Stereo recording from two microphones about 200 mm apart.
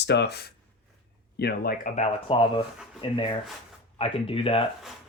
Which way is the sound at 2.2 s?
25° left (ahead or behind).